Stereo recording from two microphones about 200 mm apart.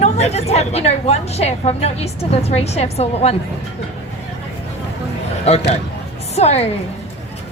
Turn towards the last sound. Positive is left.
turn(degrees=30)  # may be behind; listen again after turning